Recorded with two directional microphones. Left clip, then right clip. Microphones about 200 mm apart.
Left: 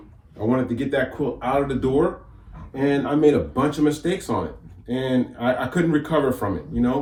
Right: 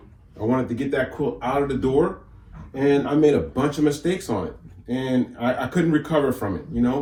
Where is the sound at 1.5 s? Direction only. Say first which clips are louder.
Left 1 dB; centre (ahead or behind).